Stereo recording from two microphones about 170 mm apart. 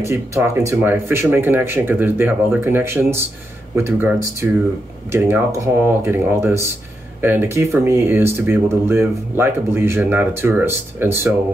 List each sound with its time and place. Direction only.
0.0 s speech: 15° right (ahead or behind)